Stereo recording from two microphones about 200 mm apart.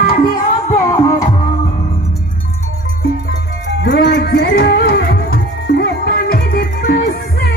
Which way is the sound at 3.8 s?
60° left (ahead or behind).